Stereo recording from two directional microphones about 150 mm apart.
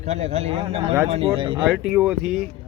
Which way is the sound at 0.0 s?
45° right (ahead or behind).